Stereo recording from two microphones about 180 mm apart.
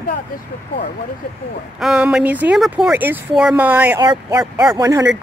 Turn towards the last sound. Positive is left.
turn(degrees=-20)  # may be behind; listen again after turning